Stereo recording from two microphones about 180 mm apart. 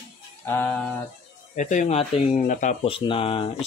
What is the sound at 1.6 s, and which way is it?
Speech, 45° left (ahead or behind).